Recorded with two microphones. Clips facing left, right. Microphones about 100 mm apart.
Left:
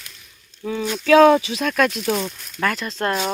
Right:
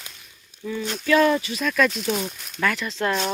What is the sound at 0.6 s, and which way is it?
Speech, 60° left (ahead or behind).